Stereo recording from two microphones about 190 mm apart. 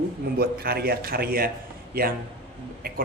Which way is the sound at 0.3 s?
55° right (ahead or behind).